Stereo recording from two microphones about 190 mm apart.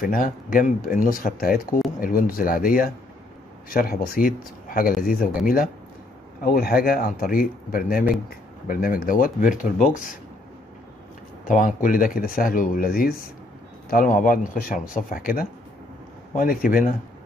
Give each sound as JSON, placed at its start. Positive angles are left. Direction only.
{"t": 0.0, "sound": "speech", "side_deg": 50}
{"t": 6.4, "sound": "speech", "side_deg": 50}
{"t": 11.4, "sound": "speech", "side_deg": 45}